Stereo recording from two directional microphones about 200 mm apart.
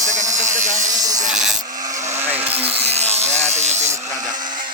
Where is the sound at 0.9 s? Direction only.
20° right (ahead or behind).